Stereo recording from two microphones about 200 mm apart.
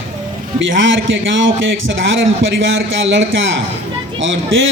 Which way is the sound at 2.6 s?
70° right (ahead or behind).